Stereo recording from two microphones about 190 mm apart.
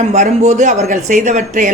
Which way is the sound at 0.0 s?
40° right (ahead or behind).